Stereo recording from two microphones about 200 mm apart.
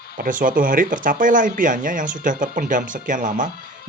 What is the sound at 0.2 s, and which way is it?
Speech, 40° right (ahead or behind).